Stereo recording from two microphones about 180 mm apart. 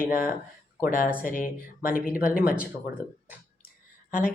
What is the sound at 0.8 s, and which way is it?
Speech, 50° left (ahead or behind).